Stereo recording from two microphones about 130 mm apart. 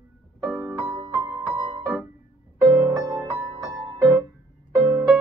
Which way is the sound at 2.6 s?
25° right (ahead or behind).